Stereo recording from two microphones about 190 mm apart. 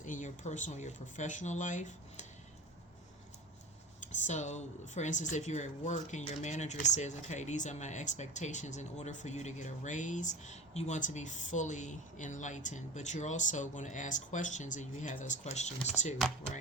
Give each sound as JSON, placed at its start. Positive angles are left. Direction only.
{"t": 0.0, "sound": "speech", "side_deg": 40}
{"t": 4.0, "sound": "speech", "side_deg": 40}